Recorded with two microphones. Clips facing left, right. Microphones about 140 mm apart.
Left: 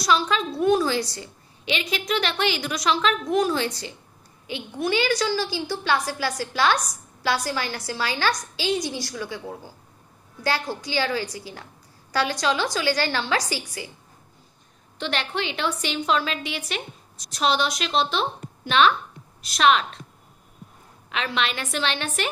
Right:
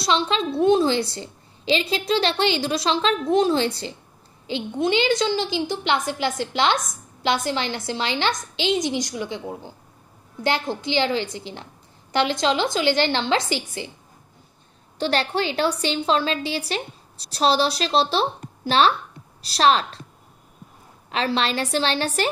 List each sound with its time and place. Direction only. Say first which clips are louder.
0.0 s a woman's voice: even; 25° right (ahead or behind)
15.0 s a woman's voice: right 5 dB; 35° right (ahead or behind)
21.1 s a woman's voice: right 4 dB; 35° right (ahead or behind)